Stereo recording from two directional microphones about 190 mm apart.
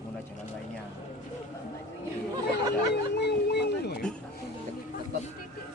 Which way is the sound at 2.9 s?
60° left (ahead or behind).